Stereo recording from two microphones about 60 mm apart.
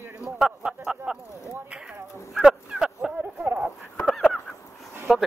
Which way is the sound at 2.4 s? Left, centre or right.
Centre.